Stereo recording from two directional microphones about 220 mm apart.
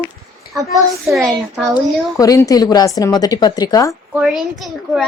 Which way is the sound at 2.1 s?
15° left (ahead or behind).